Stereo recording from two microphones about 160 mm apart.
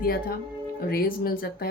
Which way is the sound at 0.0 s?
65° left (ahead or behind).